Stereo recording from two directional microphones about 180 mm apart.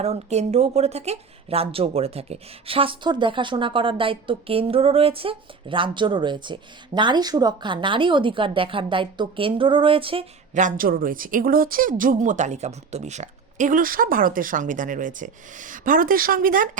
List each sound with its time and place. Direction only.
0.0 s speech: 35° right (ahead or behind)
10.5 s speech: 45° right (ahead or behind)